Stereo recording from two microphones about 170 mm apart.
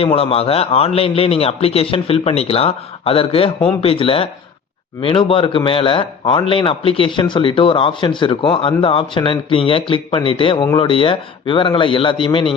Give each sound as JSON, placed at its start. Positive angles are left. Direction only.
{"t": 0.0, "sound": "a man's voice", "side_deg": 35}